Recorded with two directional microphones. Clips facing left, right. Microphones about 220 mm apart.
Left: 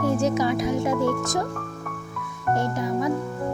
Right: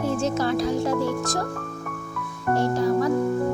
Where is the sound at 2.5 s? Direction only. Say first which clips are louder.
Right 4 dB; 20° left (ahead or behind).